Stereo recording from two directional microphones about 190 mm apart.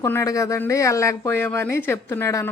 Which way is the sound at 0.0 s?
15° left (ahead or behind).